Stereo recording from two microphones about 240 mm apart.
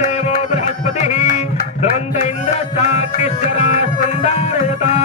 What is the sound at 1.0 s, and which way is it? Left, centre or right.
Music, left.